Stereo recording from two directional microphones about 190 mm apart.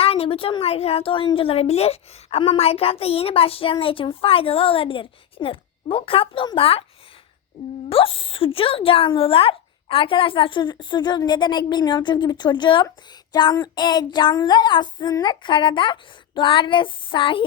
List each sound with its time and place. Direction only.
0.0 s a woman's voice: 30° left (ahead or behind)
7.9 s a woman's voice: 30° left (ahead or behind)